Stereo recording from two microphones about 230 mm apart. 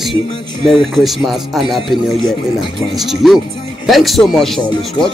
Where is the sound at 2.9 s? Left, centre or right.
Centre.